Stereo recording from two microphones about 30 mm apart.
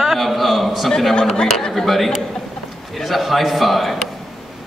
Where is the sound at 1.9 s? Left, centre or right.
Centre.